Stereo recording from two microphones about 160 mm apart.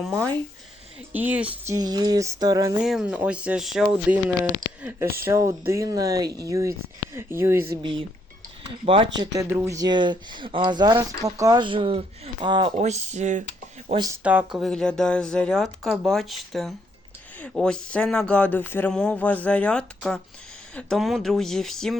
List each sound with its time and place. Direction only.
0.0 s speech: centre (ahead or behind)
1.1 s speech: 10° right (ahead or behind)
1.7 s speech: 25° right (ahead or behind)
2.8 s speech: 5° right (ahead or behind)
7.8 s speech: 30° right (ahead or behind)
9.2 s speech: 20° right (ahead or behind)
12.7 s speech: 45° right (ahead or behind)
14.3 s speech: 5° right (ahead or behind)